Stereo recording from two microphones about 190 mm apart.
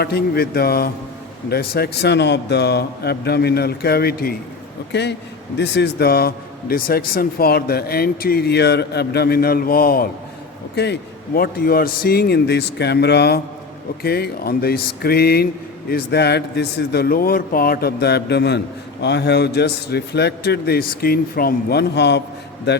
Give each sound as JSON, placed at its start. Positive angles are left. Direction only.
{"t": 0.0, "sound": "a man's voice", "side_deg": 55}
{"t": 4.9, "sound": "a man's voice", "side_deg": 65}
{"t": 11.3, "sound": "a man's voice", "side_deg": 50}